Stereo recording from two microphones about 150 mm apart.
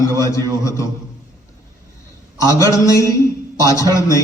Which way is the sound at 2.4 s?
20° left (ahead or behind).